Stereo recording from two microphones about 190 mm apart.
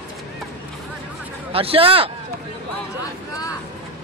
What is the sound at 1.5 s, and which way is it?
Speech, 30° right (ahead or behind).